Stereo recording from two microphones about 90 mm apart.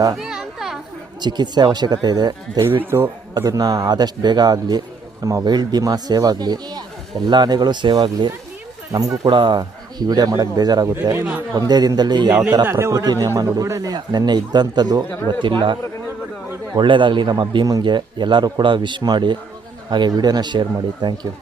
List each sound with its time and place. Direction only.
0.2 s children playing: 5° right (ahead or behind)
1.2 s a man's voice: 55° right (ahead or behind)
2.9 s a man's voice: 40° right (ahead or behind); by 8.3 s 55° right (ahead or behind)
8.9 s speech: 40° right (ahead or behind)
9.3 s a man's voice: 60° right (ahead or behind)
12.3 s speech: 15° right (ahead or behind)
12.7 s a man's voice: 40° right (ahead or behind)
15.3 s a man's voice: 60° right (ahead or behind)